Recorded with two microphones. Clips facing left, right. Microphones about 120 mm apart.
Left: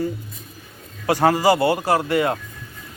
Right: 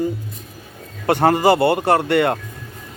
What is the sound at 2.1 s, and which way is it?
Speech, 70° right (ahead or behind).